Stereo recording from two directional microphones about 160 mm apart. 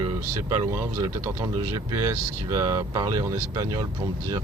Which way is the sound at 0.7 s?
20° right (ahead or behind).